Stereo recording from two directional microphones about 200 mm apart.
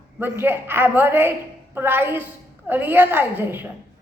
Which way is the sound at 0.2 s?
10° right (ahead or behind).